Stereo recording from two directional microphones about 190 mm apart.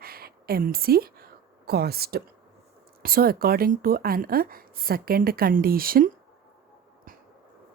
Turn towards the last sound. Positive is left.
turn(degrees=-50)  # may be behind; listen again after turning